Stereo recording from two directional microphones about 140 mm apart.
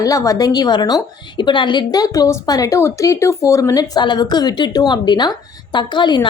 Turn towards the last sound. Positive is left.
turn(degrees=35)  # may be behind; listen again after turning